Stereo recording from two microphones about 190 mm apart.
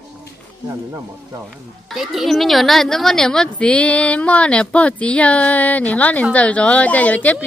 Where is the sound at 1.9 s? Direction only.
Centre (ahead or behind).